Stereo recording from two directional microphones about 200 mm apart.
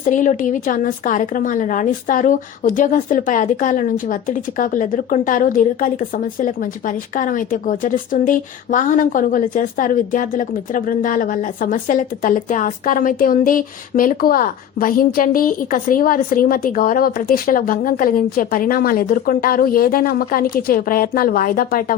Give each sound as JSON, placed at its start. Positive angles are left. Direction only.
{"t": 0.0, "sound": "a woman's voice", "side_deg": 40}